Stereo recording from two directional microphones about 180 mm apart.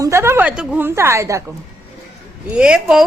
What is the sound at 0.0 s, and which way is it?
A woman's voice, 15° right (ahead or behind).